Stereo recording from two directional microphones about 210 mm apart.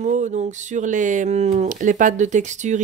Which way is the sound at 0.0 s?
35° right (ahead or behind).